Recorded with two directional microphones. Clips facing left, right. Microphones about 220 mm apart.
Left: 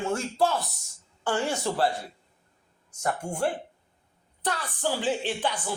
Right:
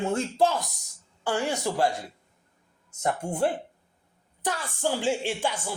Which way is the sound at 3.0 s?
20° right (ahead or behind).